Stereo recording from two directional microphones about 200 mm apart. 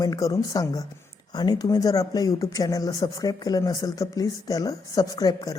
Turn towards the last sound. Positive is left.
turn(degrees=20)  # may be behind; listen again after turning